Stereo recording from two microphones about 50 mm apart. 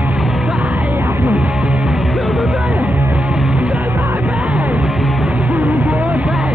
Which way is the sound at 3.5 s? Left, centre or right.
Right.